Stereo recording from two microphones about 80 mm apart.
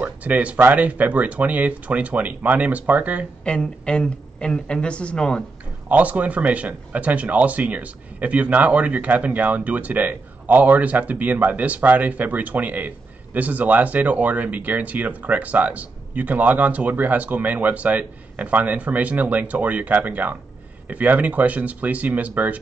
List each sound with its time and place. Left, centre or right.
0.0 s speech: centre
3.4 s a woman's voice: centre
5.9 s speech: centre